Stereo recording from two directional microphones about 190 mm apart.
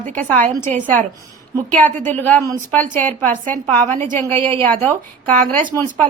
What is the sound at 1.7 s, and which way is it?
A woman's voice, 10° left (ahead or behind).